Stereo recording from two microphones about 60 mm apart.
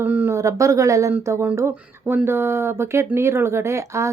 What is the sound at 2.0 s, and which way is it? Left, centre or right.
Speech, right.